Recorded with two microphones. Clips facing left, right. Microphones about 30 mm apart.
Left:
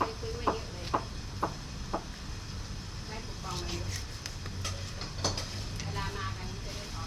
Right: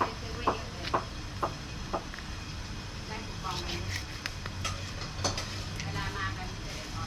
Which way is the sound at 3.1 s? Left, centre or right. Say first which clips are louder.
Right 3 dB; right.